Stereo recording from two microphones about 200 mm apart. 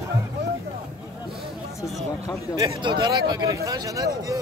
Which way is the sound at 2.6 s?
20° right (ahead or behind).